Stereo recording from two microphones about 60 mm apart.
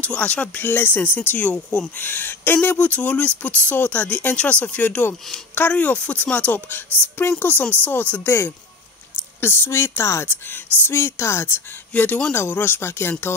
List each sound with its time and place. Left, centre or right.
0.0 s speech: left
0.6 s speech: left
8.3 s speech: left
11.9 s speech: left
12.4 s speech: left